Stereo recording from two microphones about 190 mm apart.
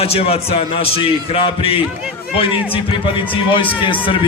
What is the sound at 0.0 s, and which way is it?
A man's voice, 30° left (ahead or behind).